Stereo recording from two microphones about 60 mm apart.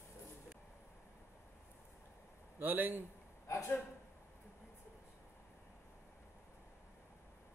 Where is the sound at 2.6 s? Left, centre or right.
Right.